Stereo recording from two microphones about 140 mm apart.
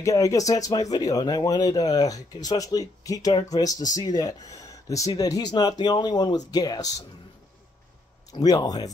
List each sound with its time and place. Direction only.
0.0 s speech: 25° left (ahead or behind)
8.3 s speech: 30° left (ahead or behind)